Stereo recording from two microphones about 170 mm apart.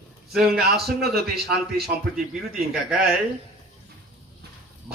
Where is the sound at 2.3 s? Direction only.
5° right (ahead or behind).